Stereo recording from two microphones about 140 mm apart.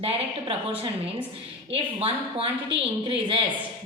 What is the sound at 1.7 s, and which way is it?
A woman's voice, 40° right (ahead or behind).